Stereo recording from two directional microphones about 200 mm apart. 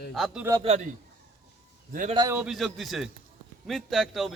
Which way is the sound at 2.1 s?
20° right (ahead or behind).